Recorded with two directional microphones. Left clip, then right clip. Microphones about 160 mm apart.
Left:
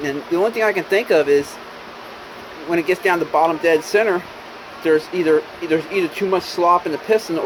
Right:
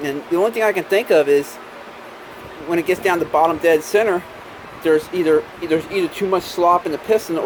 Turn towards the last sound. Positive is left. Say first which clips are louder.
# even
turn(degrees=-15)  # may be behind; listen again after turning